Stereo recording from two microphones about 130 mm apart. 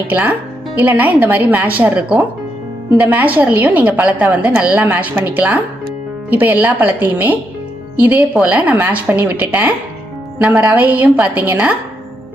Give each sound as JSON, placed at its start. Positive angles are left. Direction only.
{"t": 0.1, "sound": "a woman's voice", "side_deg": -10}